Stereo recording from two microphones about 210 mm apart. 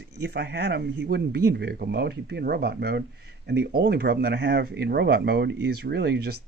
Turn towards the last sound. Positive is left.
turn(degrees=-50)  # may be behind; listen again after turning